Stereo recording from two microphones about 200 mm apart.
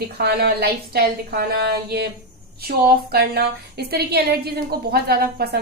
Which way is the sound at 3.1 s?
55° right (ahead or behind).